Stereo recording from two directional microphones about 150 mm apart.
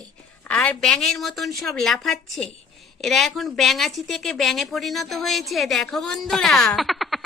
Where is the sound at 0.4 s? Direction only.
10° left (ahead or behind).